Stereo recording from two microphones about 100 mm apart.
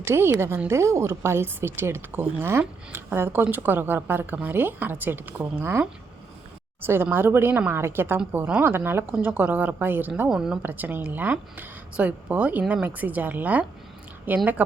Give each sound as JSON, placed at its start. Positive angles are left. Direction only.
{"t": 0.0, "sound": "speech", "side_deg": -25}
{"t": 6.8, "sound": "a woman's voice", "side_deg": -20}
{"t": 10.2, "sound": "speech", "side_deg": -5}
{"t": 10.6, "sound": "a woman's voice", "side_deg": -20}